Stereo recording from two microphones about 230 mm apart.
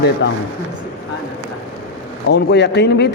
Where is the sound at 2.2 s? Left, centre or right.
Left.